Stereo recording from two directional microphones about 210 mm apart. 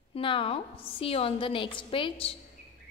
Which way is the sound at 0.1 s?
25° left (ahead or behind).